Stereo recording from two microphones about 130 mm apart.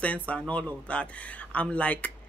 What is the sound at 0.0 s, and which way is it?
Speech, 10° left (ahead or behind).